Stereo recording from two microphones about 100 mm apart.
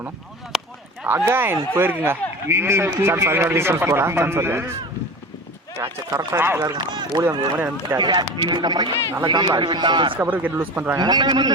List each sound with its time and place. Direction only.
0.5 s a sound: centre (ahead or behind)
1.0 s a man's voice: 20° right (ahead or behind)
5.7 s a man's voice: 30° right (ahead or behind)
6.9 s speech: 50° right (ahead or behind)
7.5 s a man's voice: 20° right (ahead or behind)
7.9 s speech: 45° right (ahead or behind)
10.2 s speech: 15° right (ahead or behind)
10.9 s speech: 45° right (ahead or behind)